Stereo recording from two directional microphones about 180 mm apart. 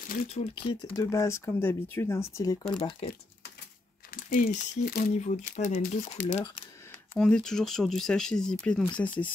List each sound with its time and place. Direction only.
0.0 s speech: 50° left (ahead or behind)
0.3 s speech: 35° left (ahead or behind); by 2.5 s 15° left (ahead or behind)
2.8 s speech: 30° left (ahead or behind)
4.1 s speech: 50° left (ahead or behind)
5.1 s speech: 40° left (ahead or behind)
7.2 s speech: 5° left (ahead or behind)